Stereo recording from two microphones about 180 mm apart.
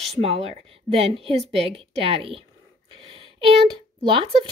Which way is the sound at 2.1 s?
30° right (ahead or behind).